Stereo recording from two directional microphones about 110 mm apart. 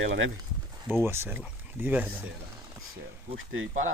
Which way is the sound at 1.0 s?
20° right (ahead or behind).